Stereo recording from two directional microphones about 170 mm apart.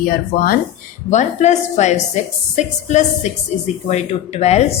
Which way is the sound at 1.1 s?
45° left (ahead or behind).